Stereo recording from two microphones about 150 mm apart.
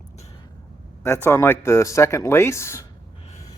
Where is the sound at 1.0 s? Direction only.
15° left (ahead or behind).